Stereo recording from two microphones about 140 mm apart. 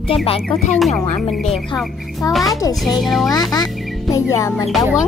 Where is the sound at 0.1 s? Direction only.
45° left (ahead or behind).